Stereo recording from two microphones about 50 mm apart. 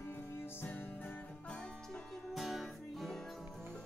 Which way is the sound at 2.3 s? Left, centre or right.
Centre.